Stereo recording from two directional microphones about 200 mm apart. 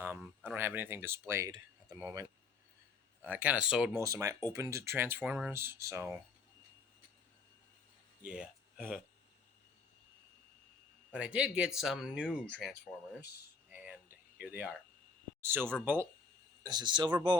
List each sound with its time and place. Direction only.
0.0 s speech: 10° right (ahead or behind)
4.0 s speech: 15° right (ahead or behind)
8.2 s speech: 5° right (ahead or behind)
11.2 s speech: 5° right (ahead or behind)
13.8 s a sound: 5° right (ahead or behind)
15.4 s speech: 10° right (ahead or behind)
16.6 s speech: 20° right (ahead or behind)